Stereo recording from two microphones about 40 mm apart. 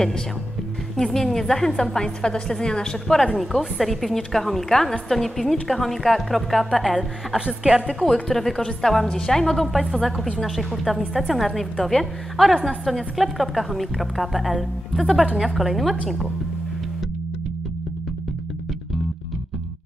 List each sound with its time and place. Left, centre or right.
0.9 s a woman's voice: centre
3.3 s a woman's voice: centre
7.0 s a woman's voice: right
8.0 s a woman's voice: centre
9.7 s a woman's voice: centre